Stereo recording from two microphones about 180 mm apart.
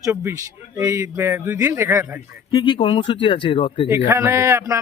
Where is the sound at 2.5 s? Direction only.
20° left (ahead or behind).